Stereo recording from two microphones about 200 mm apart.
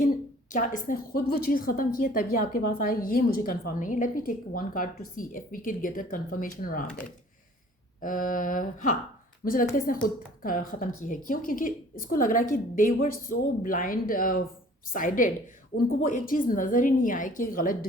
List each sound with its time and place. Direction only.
0.5 s a woman's voice: 40° left (ahead or behind)
8.0 s a woman's voice: 40° left (ahead or behind)